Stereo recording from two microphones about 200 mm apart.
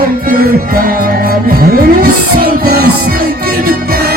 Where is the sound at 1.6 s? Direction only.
45° right (ahead or behind).